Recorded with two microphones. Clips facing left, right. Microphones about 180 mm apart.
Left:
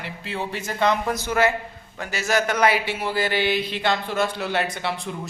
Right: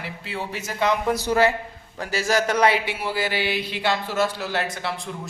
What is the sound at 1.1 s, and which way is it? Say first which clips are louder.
Speech: right 2 dB; 35° right (ahead or behind).